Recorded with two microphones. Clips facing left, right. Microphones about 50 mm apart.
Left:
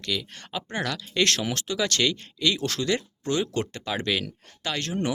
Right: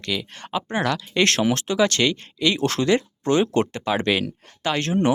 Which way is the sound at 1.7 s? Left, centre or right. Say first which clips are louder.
Right 3 dB; centre.